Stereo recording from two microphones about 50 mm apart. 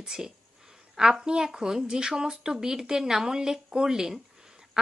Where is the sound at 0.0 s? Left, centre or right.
Centre.